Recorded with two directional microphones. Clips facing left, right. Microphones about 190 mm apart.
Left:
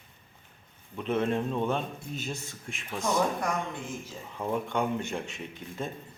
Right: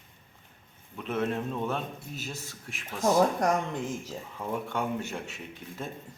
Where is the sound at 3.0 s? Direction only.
40° right (ahead or behind).